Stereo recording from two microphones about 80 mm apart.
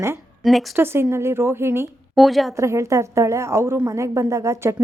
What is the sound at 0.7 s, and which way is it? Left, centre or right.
A woman's voice, right.